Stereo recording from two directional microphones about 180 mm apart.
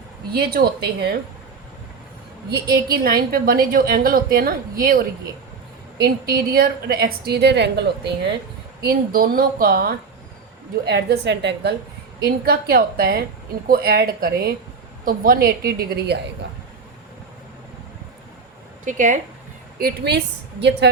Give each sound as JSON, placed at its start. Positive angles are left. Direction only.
{"t": 0.8, "sound": "a woman's voice", "side_deg": -65}
{"t": 2.9, "sound": "a woman's voice", "side_deg": -55}
{"t": 8.8, "sound": "a woman's voice", "side_deg": -55}
{"t": 12.2, "sound": "a woman's voice", "side_deg": -60}
{"t": 18.9, "sound": "a woman's voice", "side_deg": -45}
{"t": 19.8, "sound": "a woman's voice", "side_deg": -65}